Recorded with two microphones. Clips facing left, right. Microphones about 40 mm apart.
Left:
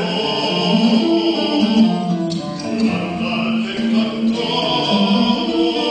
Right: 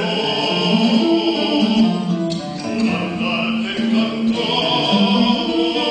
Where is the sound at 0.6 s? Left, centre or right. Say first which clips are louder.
Left 1 dB; right.